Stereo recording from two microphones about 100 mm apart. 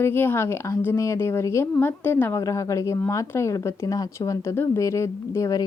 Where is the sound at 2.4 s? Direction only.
35° left (ahead or behind).